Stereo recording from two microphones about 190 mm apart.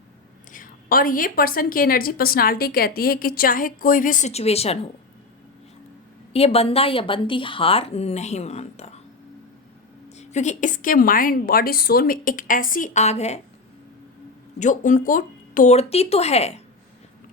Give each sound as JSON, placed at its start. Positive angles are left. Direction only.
{"t": 0.5, "sound": "a woman's voice", "side_deg": 45}
{"t": 6.3, "sound": "a woman's voice", "side_deg": 30}
{"t": 10.2, "sound": "a woman's voice", "side_deg": 40}
{"t": 14.6, "sound": "a woman's voice", "side_deg": 40}